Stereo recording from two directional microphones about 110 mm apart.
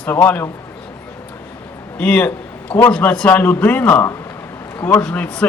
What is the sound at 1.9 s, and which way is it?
A man's voice, 10° left (ahead or behind).